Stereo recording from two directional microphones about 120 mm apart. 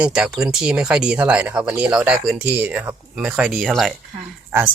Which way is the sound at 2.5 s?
15° right (ahead or behind).